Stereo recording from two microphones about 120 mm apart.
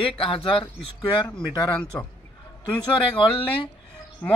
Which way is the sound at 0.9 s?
35° left (ahead or behind).